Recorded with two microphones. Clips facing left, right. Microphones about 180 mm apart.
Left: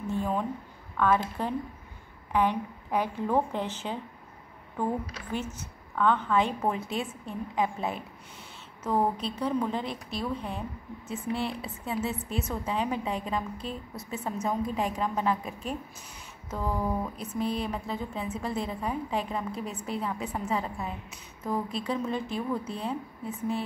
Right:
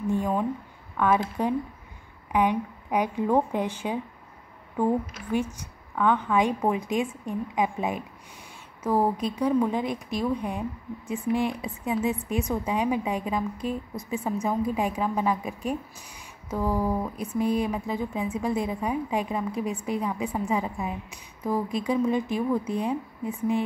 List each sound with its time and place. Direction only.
0.0 s a sound: 15° right (ahead or behind)
0.9 s speech: 15° right (ahead or behind)
5.3 s speech: 10° right (ahead or behind)